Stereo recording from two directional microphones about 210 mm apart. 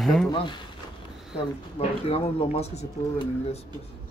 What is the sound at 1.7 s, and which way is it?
Speech, 30° left (ahead or behind).